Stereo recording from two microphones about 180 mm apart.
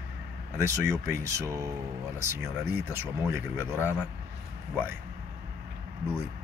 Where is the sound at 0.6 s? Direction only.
15° right (ahead or behind).